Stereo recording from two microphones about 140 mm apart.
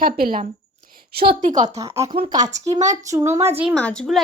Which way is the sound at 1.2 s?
80° right.